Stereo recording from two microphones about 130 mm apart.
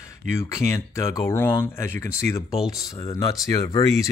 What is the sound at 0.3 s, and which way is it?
Speech, 20° left (ahead or behind).